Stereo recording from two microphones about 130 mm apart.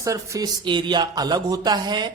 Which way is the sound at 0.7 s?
35° right (ahead or behind).